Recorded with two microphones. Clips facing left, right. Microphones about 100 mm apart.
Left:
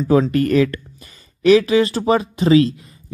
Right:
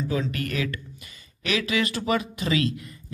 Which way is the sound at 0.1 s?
40° left (ahead or behind).